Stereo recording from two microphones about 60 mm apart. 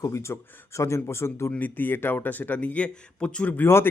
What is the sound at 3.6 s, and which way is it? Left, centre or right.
Speech, left.